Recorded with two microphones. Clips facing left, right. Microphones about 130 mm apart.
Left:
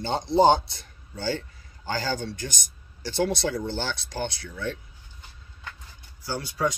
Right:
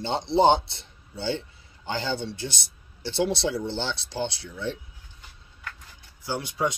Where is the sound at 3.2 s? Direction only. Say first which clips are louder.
Even; 25° right (ahead or behind).